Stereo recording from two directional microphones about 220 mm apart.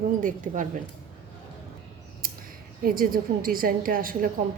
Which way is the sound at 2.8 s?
40° right (ahead or behind).